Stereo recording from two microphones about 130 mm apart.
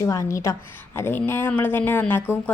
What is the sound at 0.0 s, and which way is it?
A woman's voice, 25° left (ahead or behind).